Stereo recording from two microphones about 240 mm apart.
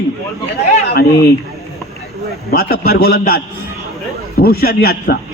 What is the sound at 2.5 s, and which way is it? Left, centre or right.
A man's voice, left.